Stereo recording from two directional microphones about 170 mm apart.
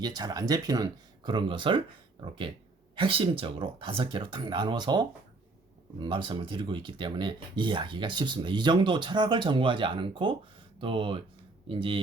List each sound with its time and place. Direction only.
0.0 s speech: 25° right (ahead or behind)